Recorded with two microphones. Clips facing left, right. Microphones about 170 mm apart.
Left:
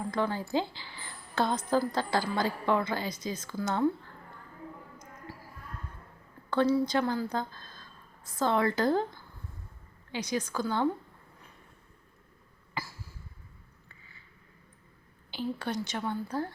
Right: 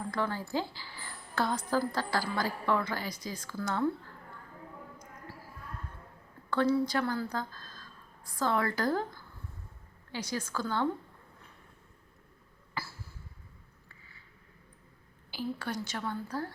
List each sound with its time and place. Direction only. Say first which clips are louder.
0.1 s a woman's voice: left 3 dB; 20° left (ahead or behind)
6.5 s a woman's voice: left 2 dB; 20° left (ahead or behind)
10.1 s a woman's voice: left 3 dB; 20° left (ahead or behind)
12.8 s a sound: left 1 dB; 15° left (ahead or behind)
15.3 s a woman's voice: left 2 dB; 20° left (ahead or behind)